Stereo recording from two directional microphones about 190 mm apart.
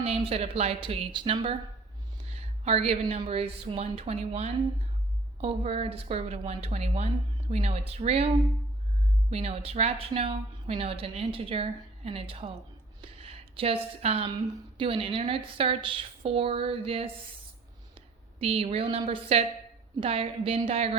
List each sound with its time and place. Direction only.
0.0 s a woman's voice: 30° right (ahead or behind)
9.3 s a woman's voice: 35° right (ahead or behind)
13.0 s a sound: 30° right (ahead or behind)
14.3 s a woman's voice: 25° right (ahead or behind)